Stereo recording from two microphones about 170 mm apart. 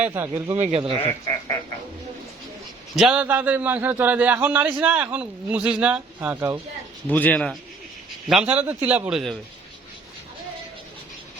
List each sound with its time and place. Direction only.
0.0 s a man's voice: 15° right (ahead or behind)
0.6 s speech: 35° right (ahead or behind)
1.0 s speech: 15° left (ahead or behind)
2.9 s a man's voice: 5° right (ahead or behind)
7.1 s speech: 10° left (ahead or behind)
8.3 s a man's voice: 5° right (ahead or behind)